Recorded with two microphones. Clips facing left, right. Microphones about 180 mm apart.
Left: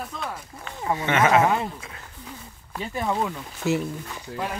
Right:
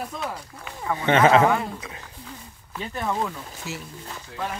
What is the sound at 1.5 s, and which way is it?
Speech, 25° left (ahead or behind).